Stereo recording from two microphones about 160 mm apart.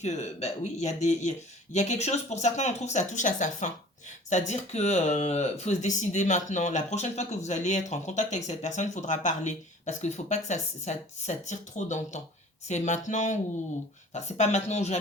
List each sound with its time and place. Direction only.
0.0 s speech: 45° left (ahead or behind)